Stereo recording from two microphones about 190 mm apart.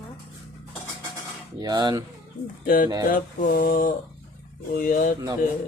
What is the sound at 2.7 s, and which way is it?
Mantra, 45° left (ahead or behind).